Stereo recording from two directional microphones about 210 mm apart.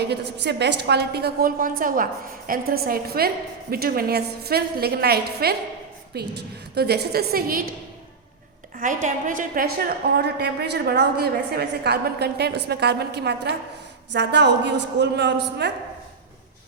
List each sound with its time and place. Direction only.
0.3 s a woman's voice: 55° right (ahead or behind)
8.7 s a woman's voice: 40° right (ahead or behind); by 15.7 s 55° right (ahead or behind)